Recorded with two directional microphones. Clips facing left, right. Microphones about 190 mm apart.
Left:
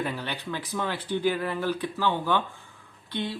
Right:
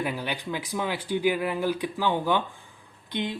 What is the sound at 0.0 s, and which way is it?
Speech, 10° right (ahead or behind).